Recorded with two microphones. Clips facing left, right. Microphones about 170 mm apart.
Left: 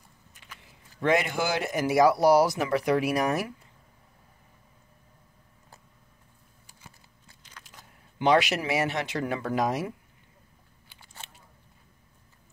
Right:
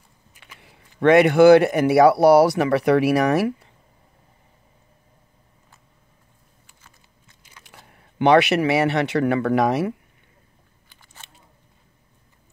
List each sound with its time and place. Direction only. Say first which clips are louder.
0.6 s speech: right 9 dB; 65° right (ahead or behind)
7.4 s single-lens reflex camera: even; 10° right (ahead or behind)
8.2 s speech: right 7 dB; 65° right (ahead or behind)